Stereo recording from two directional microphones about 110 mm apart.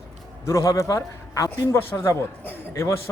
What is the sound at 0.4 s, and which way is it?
A man's voice, 25° left (ahead or behind).